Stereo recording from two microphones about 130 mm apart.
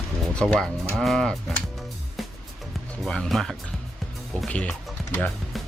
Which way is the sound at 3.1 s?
5° left (ahead or behind).